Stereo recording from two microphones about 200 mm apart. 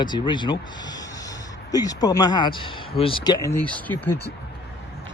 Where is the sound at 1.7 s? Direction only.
20° left (ahead or behind).